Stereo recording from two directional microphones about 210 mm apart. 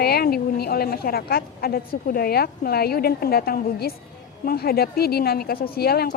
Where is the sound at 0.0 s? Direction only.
50° left (ahead or behind).